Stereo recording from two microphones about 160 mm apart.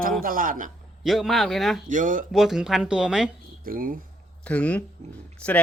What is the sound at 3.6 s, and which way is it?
Speech, 60° right (ahead or behind).